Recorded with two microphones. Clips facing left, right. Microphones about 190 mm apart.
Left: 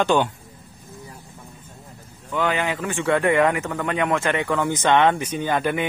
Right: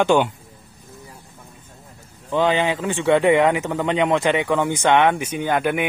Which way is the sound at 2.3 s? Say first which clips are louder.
Right 4 dB; 25° right (ahead or behind).